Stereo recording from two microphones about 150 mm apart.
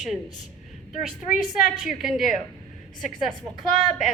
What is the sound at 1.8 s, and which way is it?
Speech, centre (ahead or behind).